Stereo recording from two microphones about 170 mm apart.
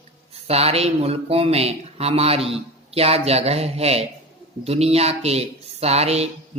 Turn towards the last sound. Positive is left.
turn(degrees=-40)  # may be behind; listen again after turning